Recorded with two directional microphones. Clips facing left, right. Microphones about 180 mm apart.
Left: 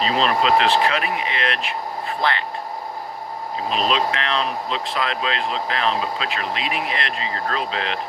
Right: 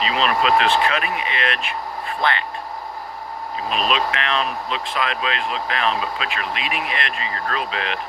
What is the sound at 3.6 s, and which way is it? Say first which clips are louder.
Speech: left 1 dB; 25° left (ahead or behind).